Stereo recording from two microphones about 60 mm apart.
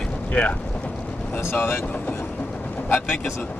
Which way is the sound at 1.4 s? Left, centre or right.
Left.